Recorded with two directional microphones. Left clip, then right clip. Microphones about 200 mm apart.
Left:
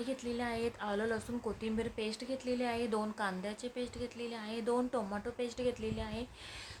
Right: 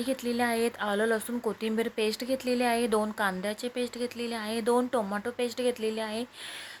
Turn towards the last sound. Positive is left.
turn(degrees=-25)  # may be behind; listen again after turning